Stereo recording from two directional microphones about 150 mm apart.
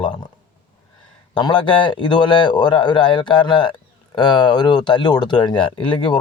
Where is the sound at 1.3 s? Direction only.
35° left (ahead or behind).